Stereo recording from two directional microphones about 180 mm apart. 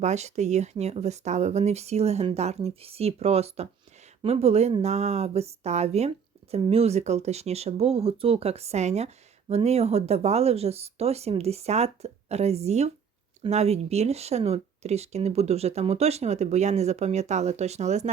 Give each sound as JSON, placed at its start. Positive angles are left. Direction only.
{"t": 0.0, "sound": "speech", "side_deg": -40}